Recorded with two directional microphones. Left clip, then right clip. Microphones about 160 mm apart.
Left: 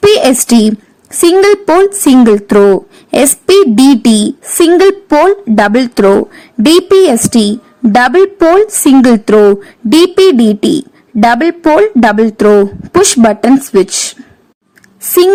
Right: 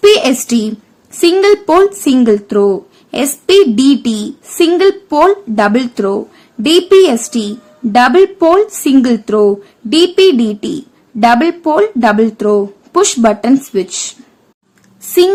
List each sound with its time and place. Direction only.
0.0 s a woman's voice: 35° left (ahead or behind)